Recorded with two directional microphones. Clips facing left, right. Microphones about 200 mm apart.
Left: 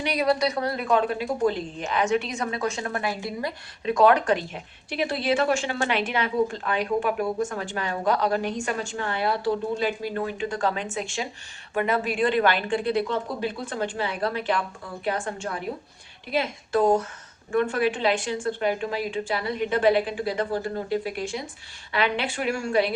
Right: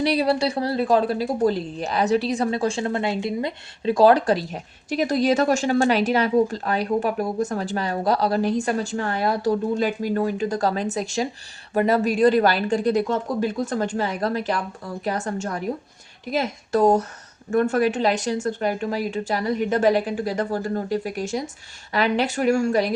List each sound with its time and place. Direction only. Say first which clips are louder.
0.0 s a woman's voice: right 3 dB; 30° right (ahead or behind)